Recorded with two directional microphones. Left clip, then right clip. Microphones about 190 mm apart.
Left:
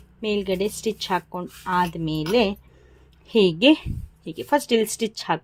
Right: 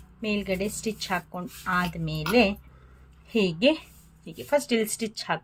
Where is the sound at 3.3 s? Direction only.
35° left (ahead or behind).